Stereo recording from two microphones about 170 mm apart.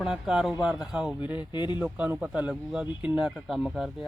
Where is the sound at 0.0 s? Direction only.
5° right (ahead or behind).